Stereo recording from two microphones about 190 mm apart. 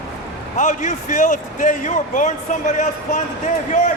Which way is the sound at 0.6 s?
40° left (ahead or behind).